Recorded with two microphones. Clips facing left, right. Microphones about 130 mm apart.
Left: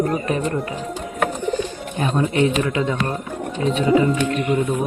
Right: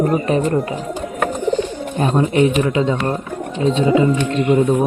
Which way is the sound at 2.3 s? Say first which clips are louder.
Right 4 dB; 20° right (ahead or behind).